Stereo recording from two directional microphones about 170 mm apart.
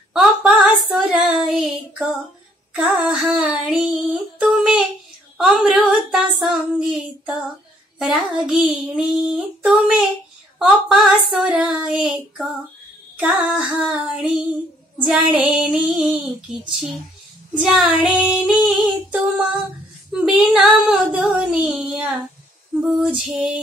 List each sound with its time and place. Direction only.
0.1 s female singing: 5° right (ahead or behind)
15.6 s female singing: centre (ahead or behind)